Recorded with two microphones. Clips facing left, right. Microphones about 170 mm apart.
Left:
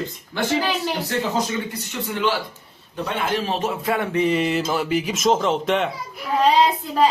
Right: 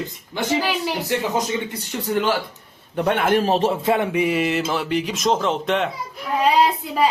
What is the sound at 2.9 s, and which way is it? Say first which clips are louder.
A man's voice: right 6 dB; 60° right (ahead or behind).